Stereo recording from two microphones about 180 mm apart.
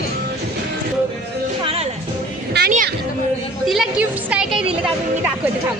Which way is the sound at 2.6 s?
70° right (ahead or behind).